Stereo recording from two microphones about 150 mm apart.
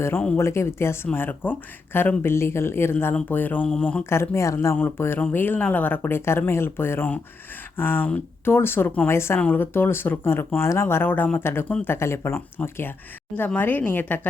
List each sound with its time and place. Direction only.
0.0 s speech: 10° left (ahead or behind)
4.1 s speech: 20° left (ahead or behind)